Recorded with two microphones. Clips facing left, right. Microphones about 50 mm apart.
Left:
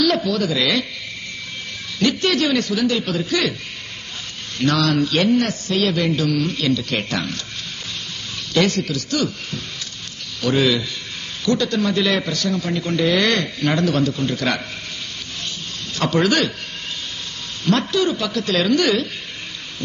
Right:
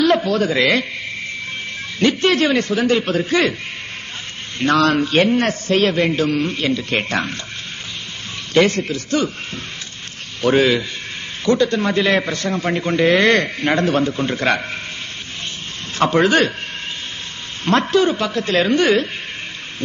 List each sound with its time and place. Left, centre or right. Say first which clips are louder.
0.0 s speech: right 3 dB; right
2.0 s a man's voice: right 3 dB; right
4.6 s a man's voice: right 3 dB; right
8.5 s a man's voice: right 3 dB; right
16.0 s a man's voice: right 4 dB; right
17.6 s a man's voice: right 3 dB; right